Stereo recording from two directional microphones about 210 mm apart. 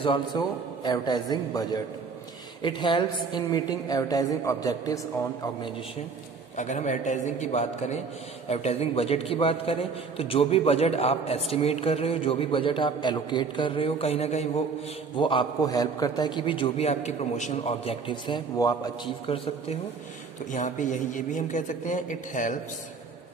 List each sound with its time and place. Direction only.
0.0 s a man's voice: 20° left (ahead or behind)
6.5 s a man's voice: 35° left (ahead or behind)